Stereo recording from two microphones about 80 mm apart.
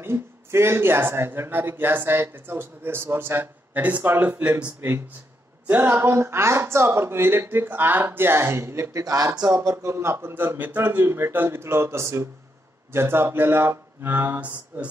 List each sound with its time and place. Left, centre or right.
0.0 s speech: right; by 4.7 s centre
5.7 s speech: right
9.5 s speech: right